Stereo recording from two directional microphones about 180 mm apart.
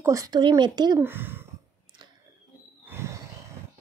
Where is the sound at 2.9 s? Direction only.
15° right (ahead or behind).